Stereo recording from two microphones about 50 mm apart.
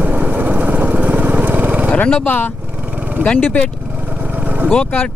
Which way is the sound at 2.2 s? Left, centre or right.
Left.